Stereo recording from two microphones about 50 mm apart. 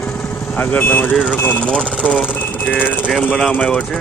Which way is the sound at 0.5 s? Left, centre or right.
Left.